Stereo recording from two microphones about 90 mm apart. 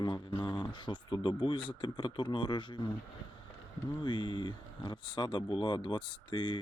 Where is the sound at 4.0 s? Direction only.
55° left (ahead or behind).